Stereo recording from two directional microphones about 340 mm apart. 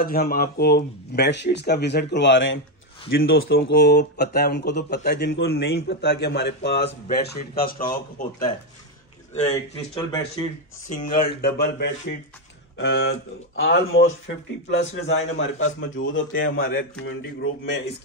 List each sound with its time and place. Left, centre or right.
0.0 s speech: left
9.3 s speech: centre
10.9 s a man's voice: left